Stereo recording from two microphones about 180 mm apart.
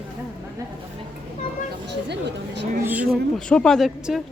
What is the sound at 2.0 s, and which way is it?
Speech, 70° right (ahead or behind).